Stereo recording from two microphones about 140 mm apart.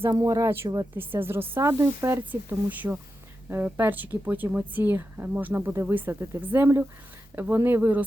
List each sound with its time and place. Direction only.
0.0 s a woman's voice: 25° right (ahead or behind)